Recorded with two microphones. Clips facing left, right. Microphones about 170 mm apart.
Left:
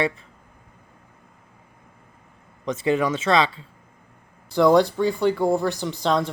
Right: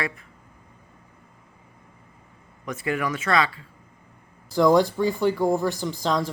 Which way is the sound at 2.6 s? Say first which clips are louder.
Left 5 dB; 25° left (ahead or behind).